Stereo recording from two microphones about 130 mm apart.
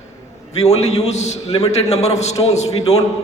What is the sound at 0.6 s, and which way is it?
Speech, 55° left (ahead or behind).